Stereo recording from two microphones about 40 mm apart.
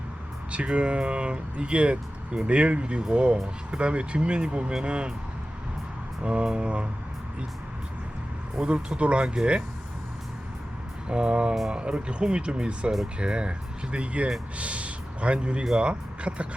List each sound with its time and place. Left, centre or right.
0.5 s speech: right
6.2 s speech: right
8.6 s speech: centre
9.0 s speech: right
11.1 s speech: right